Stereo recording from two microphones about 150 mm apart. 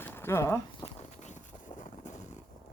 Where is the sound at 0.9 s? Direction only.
50° left (ahead or behind).